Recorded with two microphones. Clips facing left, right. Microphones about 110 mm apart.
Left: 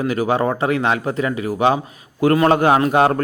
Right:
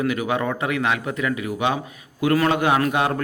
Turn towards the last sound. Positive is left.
turn(degrees=40)  # may be behind; listen again after turning